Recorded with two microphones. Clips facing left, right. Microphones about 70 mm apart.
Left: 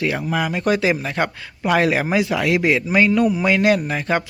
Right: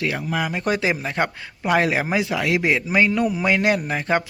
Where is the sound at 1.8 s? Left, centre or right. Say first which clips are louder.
Left 3 dB; centre.